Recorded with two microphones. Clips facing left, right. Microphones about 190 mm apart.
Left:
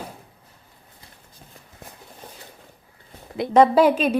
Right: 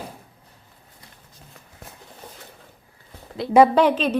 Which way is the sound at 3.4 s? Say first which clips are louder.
Even; 20° left (ahead or behind).